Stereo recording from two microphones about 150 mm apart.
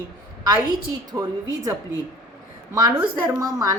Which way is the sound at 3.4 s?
25° right (ahead or behind).